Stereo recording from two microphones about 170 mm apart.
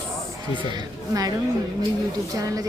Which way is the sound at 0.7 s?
20° right (ahead or behind).